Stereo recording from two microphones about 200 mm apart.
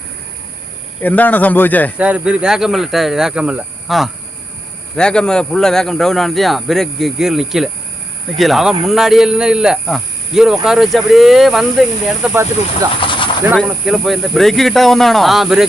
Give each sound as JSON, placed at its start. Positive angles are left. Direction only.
{"t": 1.0, "sound": "speech", "side_deg": 10}
{"t": 2.0, "sound": "speech", "side_deg": -5}
{"t": 12.3, "sound": "speech", "side_deg": -15}
{"t": 13.0, "sound": "a sound", "side_deg": 25}
{"t": 13.7, "sound": "speech", "side_deg": 0}